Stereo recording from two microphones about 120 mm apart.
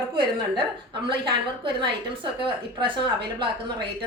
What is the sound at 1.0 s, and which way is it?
Speech, 45° right (ahead or behind).